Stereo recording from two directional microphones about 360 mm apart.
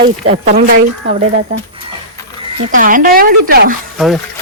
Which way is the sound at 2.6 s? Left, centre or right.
Right.